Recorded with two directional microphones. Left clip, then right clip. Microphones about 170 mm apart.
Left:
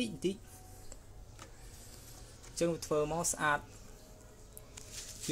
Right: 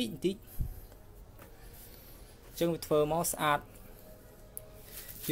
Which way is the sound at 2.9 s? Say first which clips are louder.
Right 4 dB; 10° right (ahead or behind).